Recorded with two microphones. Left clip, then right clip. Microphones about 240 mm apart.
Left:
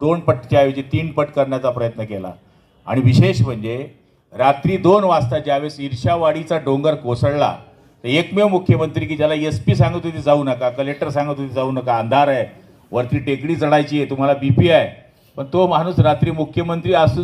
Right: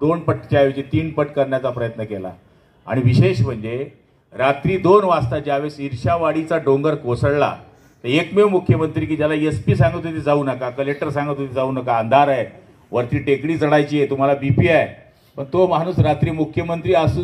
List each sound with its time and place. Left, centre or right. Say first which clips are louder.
0.0 s a man's voice: left 2 dB; left